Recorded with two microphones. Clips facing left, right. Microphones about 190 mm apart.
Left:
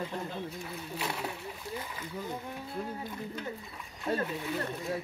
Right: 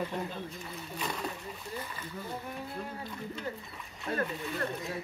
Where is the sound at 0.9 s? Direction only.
10° left (ahead or behind).